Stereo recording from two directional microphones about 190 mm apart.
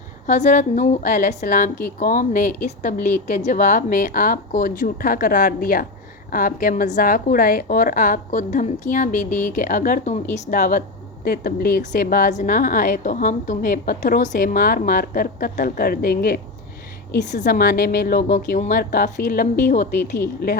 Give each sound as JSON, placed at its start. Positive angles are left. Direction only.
{"t": 0.3, "sound": "a woman's voice", "side_deg": 40}